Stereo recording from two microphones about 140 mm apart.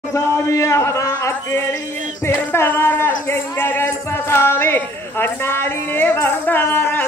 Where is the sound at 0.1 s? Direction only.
20° left (ahead or behind).